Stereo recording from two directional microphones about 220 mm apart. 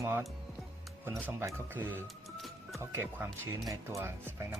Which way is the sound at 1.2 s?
10° right (ahead or behind).